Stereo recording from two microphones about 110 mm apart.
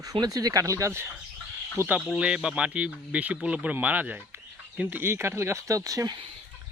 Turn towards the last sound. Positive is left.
turn(degrees=-30)  # may be behind; listen again after turning